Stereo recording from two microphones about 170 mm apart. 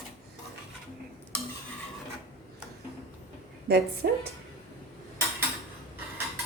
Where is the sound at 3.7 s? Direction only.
70° right (ahead or behind).